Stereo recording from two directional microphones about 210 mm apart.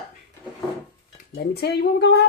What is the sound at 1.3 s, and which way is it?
Speech, 50° left (ahead or behind).